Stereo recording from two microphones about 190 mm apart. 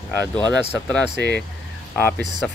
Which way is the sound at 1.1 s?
65° left (ahead or behind).